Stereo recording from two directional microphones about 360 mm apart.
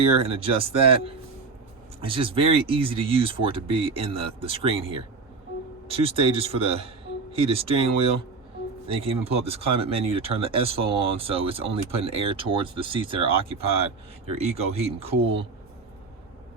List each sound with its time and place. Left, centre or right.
0.0 s speech: centre